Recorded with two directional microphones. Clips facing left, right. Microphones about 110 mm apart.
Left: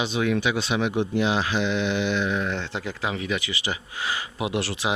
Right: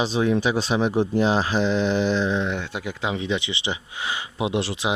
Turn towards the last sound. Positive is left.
turn(degrees=-20)  # may be behind; listen again after turning